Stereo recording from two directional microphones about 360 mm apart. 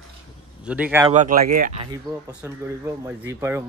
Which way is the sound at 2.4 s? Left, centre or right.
Centre.